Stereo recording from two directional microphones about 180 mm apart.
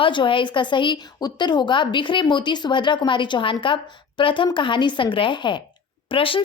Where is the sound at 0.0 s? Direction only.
25° left (ahead or behind).